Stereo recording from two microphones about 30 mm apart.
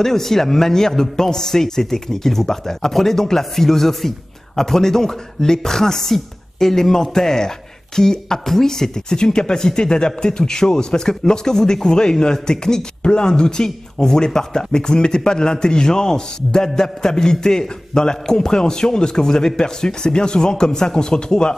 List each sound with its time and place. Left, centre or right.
0.0 s a woman's voice: centre